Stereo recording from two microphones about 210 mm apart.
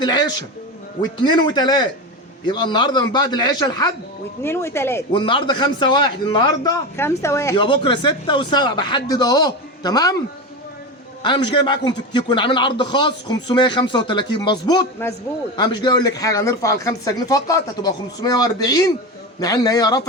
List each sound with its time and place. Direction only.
0.0 s speech: 20° left (ahead or behind)
5.1 s speech: 25° left (ahead or behind)
11.6 s speech: 20° left (ahead or behind)